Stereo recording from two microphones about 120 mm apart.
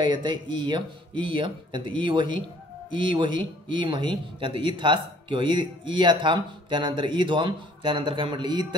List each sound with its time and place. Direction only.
0.0 s speech: 40° right (ahead or behind)